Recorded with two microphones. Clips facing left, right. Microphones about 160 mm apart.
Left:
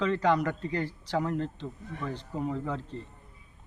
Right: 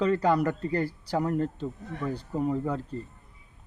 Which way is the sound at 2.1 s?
10° right (ahead or behind).